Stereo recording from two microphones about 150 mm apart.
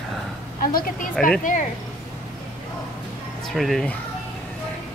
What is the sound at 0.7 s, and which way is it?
Speech, 65° left (ahead or behind).